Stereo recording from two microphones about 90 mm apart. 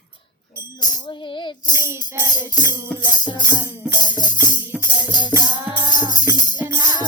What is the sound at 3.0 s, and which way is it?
Music, 55° left (ahead or behind).